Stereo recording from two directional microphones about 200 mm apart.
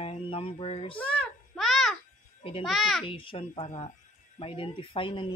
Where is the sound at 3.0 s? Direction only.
25° left (ahead or behind).